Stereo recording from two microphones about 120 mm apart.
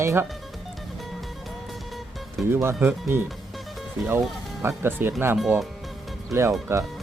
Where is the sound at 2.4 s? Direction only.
20° right (ahead or behind).